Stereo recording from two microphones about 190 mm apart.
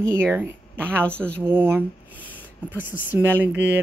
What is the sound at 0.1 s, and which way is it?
Speech, 10° right (ahead or behind).